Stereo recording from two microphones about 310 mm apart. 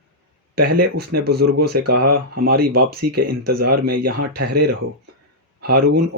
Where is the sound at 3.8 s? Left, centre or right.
Right.